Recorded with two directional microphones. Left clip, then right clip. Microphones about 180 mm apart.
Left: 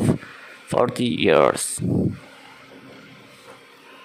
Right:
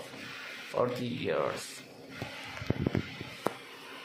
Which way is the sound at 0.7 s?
60° left (ahead or behind).